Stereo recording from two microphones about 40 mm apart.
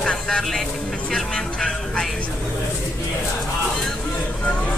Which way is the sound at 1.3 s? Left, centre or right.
Left.